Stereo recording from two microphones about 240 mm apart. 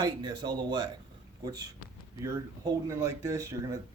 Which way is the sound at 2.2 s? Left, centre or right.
Centre.